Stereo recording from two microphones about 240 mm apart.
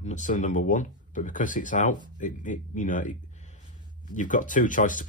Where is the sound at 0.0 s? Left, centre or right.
Left.